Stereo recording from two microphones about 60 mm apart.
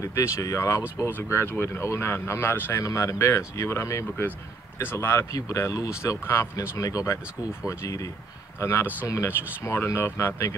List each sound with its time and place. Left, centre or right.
0.0 s speech: left
1.1 s speech: left
1.8 s speech: left
2.7 s speech: left
5.3 s speech: left
6.2 s speech: left
6.5 s speech: left
8.5 s speech: left